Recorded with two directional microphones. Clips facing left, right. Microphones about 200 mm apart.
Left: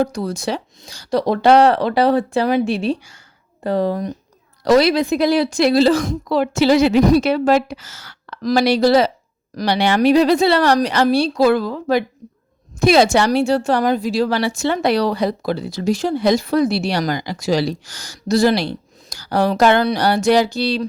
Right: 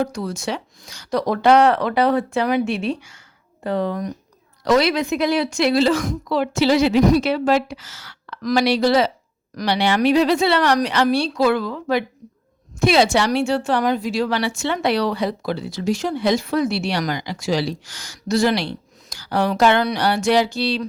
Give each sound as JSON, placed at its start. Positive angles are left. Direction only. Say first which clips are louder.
{"t": 0.0, "sound": "a woman's voice", "louder": "left 3 dB", "side_deg": 35}